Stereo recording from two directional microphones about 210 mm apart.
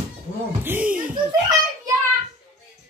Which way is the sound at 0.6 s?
5° right (ahead or behind).